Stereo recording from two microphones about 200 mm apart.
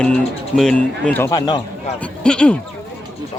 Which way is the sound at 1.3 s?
20° left (ahead or behind).